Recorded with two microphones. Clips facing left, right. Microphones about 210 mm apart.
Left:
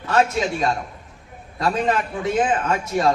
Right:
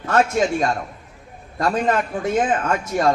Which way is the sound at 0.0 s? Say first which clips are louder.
Right 2 dB; 50° right (ahead or behind).